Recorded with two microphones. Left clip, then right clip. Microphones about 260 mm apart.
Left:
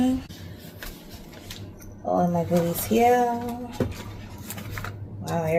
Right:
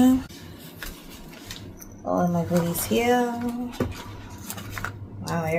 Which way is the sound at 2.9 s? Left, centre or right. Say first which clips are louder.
Left 3 dB; centre.